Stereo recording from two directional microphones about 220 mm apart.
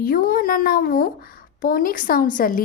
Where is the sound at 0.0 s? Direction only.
40° left (ahead or behind).